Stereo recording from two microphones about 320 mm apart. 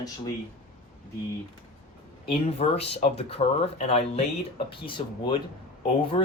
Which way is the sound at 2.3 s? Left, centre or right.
Centre.